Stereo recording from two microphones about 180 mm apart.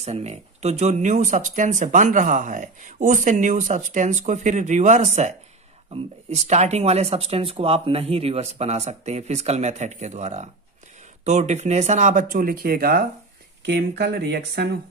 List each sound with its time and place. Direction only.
0.0 s speech: 35° right (ahead or behind); by 13.0 s 55° right (ahead or behind)
13.7 s speech: 65° right (ahead or behind)